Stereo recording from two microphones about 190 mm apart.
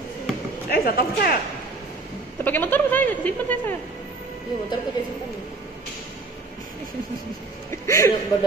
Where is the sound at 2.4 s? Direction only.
10° left (ahead or behind).